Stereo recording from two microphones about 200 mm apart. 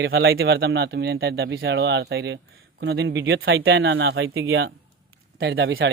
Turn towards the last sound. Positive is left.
turn(degrees=-70)  # may be behind; listen again after turning